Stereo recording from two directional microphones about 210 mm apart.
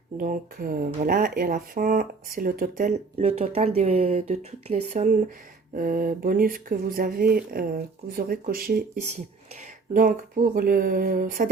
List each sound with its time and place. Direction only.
0.2 s speech: 40° right (ahead or behind)
9.9 s speech: 40° right (ahead or behind)